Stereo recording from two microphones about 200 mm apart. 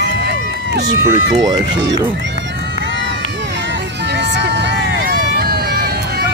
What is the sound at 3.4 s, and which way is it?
Vehicle, 60° right (ahead or behind).